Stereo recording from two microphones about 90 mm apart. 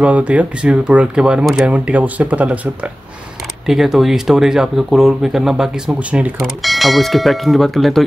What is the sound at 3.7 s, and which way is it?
Speech, 5° right (ahead or behind).